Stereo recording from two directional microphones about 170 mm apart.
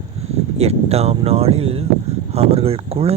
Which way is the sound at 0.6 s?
35° right (ahead or behind).